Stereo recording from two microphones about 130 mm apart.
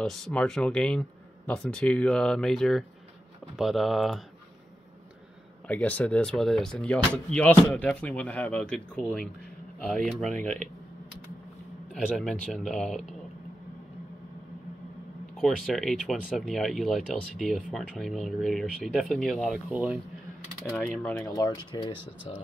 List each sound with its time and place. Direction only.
0.0 s speech: 5° left (ahead or behind)
5.7 s speech: 10° left (ahead or behind)
10.3 s speech: 10° left (ahead or behind)
11.9 s speech: 5° left (ahead or behind)
15.4 s speech: centre (ahead or behind)
20.9 s speech: 5° left (ahead or behind)
21.2 s speech: 25° left (ahead or behind)